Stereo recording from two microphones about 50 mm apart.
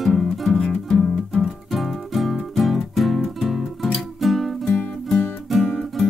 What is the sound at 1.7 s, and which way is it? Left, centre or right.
Music, centre.